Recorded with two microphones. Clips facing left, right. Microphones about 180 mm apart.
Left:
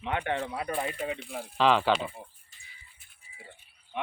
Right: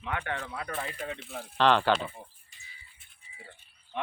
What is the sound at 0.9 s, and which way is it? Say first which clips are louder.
Speech: left 4 dB; 15° left (ahead or behind).